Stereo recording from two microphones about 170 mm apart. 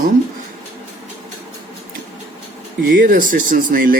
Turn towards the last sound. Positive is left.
turn(degrees=-55)  # may be behind; listen again after turning